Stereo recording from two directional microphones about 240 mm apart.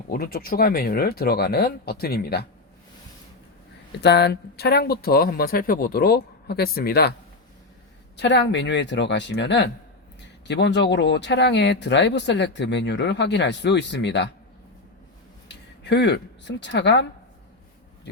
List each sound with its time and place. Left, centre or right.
0.1 s speech: left
4.0 s speech: left
8.1 s speech: left
15.4 s speech: left